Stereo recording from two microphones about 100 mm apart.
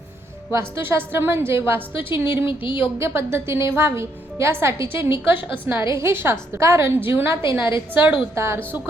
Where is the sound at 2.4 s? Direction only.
55° left (ahead or behind).